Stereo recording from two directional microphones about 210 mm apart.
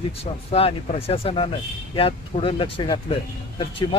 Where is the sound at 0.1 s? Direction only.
30° left (ahead or behind).